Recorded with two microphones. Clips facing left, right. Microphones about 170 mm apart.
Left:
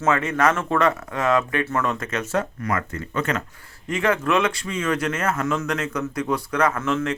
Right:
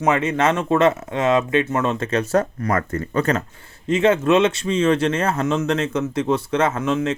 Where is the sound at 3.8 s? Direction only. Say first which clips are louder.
Right 6 dB; 25° right (ahead or behind).